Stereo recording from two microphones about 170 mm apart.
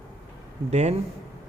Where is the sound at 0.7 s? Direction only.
40° right (ahead or behind).